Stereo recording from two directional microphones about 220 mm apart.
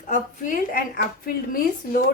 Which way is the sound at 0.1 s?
40° left (ahead or behind).